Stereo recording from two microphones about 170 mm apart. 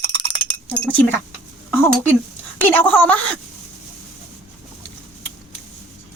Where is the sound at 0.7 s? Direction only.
10° left (ahead or behind).